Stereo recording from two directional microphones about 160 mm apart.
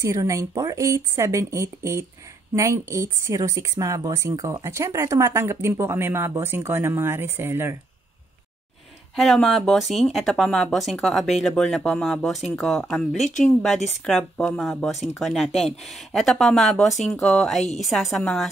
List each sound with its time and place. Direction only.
0.0 s speech: 15° right (ahead or behind)
9.1 s speech: centre (ahead or behind)